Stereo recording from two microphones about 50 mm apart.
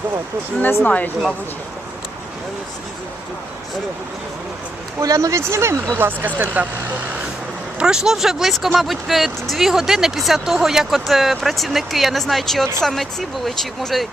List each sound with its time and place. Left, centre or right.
0.9 s speech: left
4.9 s speech: right
6.0 s speech: right
7.8 s speech: centre